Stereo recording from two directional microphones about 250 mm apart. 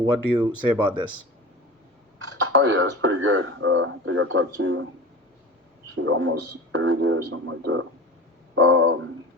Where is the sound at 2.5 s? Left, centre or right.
Right.